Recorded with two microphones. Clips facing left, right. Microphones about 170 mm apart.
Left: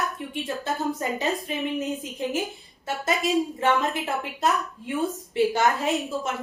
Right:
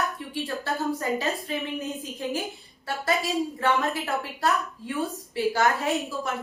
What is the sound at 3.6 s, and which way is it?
A woman's voice, 20° left (ahead or behind).